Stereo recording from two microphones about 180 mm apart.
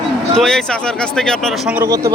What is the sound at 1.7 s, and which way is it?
Speech, 15° right (ahead or behind).